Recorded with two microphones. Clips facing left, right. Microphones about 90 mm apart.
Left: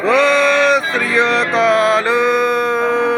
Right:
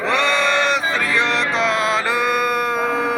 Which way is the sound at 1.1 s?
35° left (ahead or behind).